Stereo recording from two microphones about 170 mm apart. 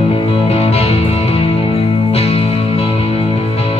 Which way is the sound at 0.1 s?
35° left (ahead or behind).